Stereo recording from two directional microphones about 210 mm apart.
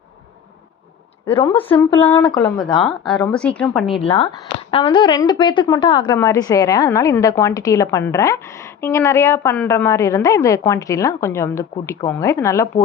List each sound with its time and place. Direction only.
1.4 s a woman's voice: 10° left (ahead or behind)
2.8 s a woman's voice: 5° left (ahead or behind)
4.7 s a woman's voice: 25° left (ahead or behind)